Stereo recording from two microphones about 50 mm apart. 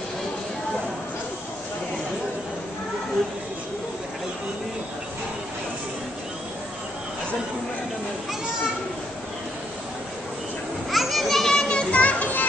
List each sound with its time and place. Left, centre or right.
10.9 s children playing: centre
11.9 s children playing: left